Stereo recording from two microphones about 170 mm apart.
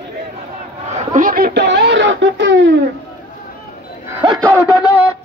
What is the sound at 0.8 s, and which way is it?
Speech, 45° right (ahead or behind).